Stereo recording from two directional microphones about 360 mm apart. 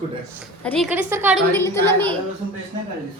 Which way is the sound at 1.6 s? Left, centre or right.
Centre.